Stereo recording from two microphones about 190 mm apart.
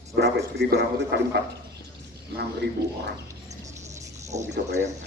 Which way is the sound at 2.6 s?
65° right (ahead or behind).